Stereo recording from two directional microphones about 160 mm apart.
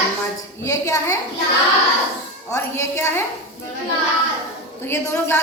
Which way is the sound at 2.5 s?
15° left (ahead or behind).